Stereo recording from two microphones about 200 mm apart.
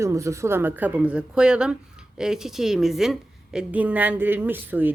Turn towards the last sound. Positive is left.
turn(degrees=-10)  # may be behind; listen again after turning